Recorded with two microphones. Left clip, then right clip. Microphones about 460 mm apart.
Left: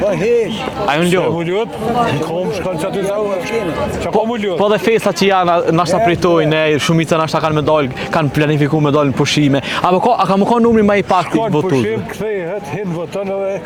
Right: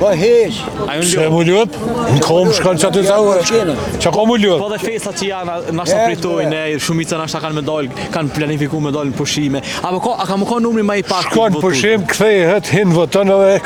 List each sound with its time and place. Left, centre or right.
0.0 s speech: right
1.0 s speech: right
2.3 s speech: right
4.0 s speech: right
4.6 s speech: left; by 11.0 s centre
11.1 s speech: right
11.6 s speech: right